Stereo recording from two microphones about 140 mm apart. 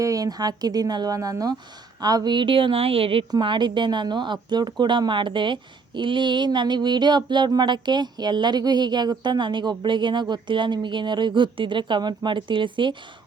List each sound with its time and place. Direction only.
0.0 s speech: 25° right (ahead or behind)